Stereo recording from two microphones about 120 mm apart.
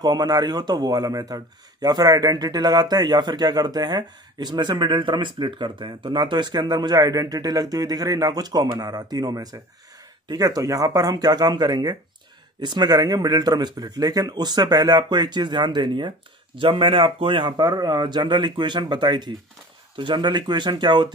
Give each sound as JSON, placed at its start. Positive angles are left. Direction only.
{"t": 0.0, "sound": "a man's voice", "side_deg": -35}